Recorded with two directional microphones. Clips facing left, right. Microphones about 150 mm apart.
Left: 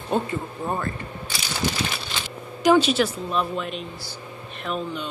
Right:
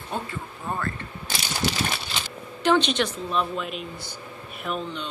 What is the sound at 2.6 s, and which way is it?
A woman's voice, 5° left (ahead or behind).